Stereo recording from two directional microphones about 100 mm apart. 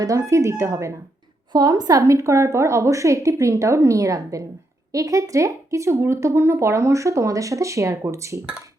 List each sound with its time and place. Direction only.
0.0 s speech: 35° right (ahead or behind)
1.5 s speech: 40° right (ahead or behind)